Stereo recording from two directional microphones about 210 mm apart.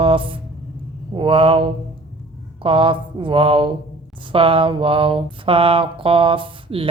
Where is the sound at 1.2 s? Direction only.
25° right (ahead or behind).